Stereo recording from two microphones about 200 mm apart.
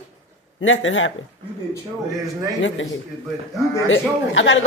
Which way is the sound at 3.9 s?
70° left (ahead or behind).